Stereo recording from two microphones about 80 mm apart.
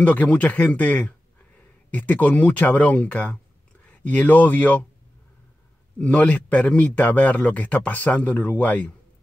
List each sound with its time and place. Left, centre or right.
0.0 s speech: centre
5.9 s speech: centre